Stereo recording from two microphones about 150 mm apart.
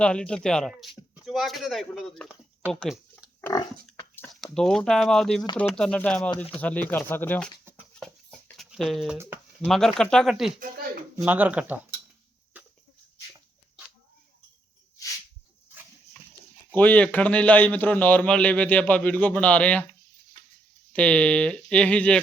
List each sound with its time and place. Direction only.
0.0 s speech: 5° left (ahead or behind)
2.8 s a sound: 5° right (ahead or behind)
3.4 s pig: 25° left (ahead or behind)
4.5 s a man's voice: 5° left (ahead or behind)
8.5 s a sound: centre (ahead or behind)
9.1 s a sound: 15° right (ahead or behind)
9.6 s speech: centre (ahead or behind)
10.6 s speech: 75° right (ahead or behind)
11.2 s speech: 10° right (ahead or behind)
12.5 s chicken: 10° right (ahead or behind)
16.7 s a man's voice: 10° left (ahead or behind)
20.9 s a man's voice: 10° left (ahead or behind)